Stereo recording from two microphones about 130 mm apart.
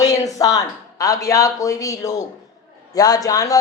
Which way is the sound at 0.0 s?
25° left (ahead or behind).